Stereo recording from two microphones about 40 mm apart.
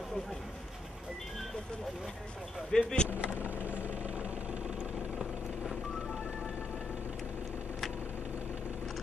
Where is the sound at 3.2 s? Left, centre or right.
Right.